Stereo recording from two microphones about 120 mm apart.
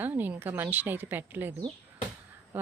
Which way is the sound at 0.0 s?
15° right (ahead or behind).